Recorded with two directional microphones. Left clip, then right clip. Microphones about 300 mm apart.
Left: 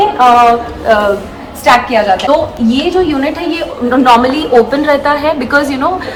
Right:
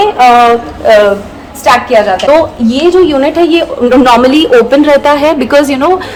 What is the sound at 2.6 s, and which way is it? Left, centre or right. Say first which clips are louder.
Speech: right 5 dB; centre.